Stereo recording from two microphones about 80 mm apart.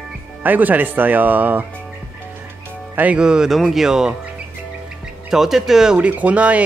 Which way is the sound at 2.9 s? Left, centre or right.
Centre.